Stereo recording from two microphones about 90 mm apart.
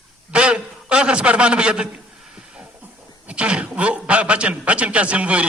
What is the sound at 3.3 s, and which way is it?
A man's voice, 15° right (ahead or behind).